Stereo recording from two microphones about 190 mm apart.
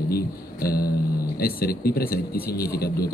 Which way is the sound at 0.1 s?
50° left (ahead or behind).